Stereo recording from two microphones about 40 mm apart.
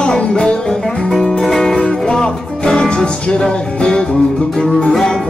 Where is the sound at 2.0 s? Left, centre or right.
Centre.